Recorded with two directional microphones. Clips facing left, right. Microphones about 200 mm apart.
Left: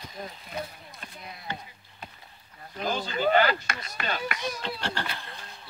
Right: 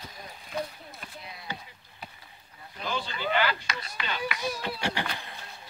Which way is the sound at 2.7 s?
40° left (ahead or behind).